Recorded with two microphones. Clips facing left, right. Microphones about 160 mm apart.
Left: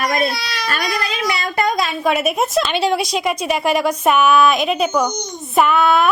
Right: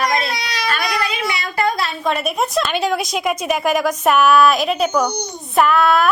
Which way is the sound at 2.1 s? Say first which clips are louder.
Left 2 dB; 5° left (ahead or behind).